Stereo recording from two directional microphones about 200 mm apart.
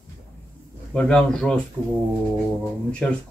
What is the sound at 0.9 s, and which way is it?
Speech, 5° left (ahead or behind).